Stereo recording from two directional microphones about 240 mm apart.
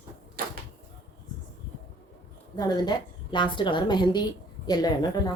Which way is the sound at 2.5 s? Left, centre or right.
Centre.